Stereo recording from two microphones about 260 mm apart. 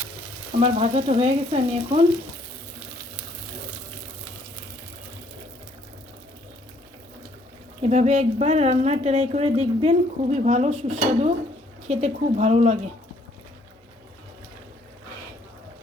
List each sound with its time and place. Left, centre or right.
0.6 s a woman's voice: right
7.8 s a woman's voice: right